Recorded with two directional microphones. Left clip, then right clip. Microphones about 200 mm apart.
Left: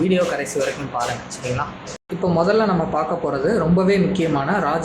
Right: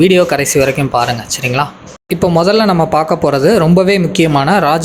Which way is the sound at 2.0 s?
45° right (ahead or behind).